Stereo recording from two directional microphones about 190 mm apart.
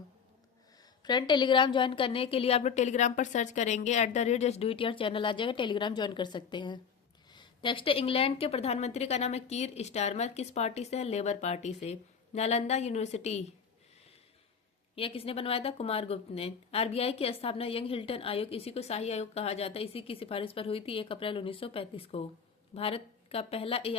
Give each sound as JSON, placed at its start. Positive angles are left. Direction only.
{"t": 0.8, "sound": "a woman's voice", "side_deg": 20}
{"t": 14.9, "sound": "speech", "side_deg": 30}